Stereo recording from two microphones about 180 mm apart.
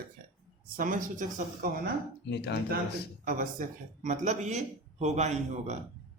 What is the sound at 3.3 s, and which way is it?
Speech, 45° right (ahead or behind).